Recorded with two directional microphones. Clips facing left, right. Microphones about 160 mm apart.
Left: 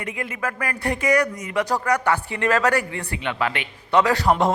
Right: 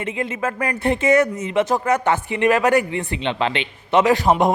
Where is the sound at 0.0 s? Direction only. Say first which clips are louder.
Right 4 dB; 25° right (ahead or behind).